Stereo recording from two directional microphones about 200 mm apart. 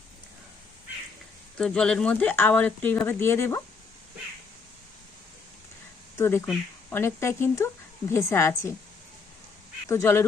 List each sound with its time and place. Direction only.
1.5 s speech: 5° left (ahead or behind)
6.1 s speech: 10° left (ahead or behind)
7.0 s speech: 15° left (ahead or behind)
9.9 s speech: 10° left (ahead or behind)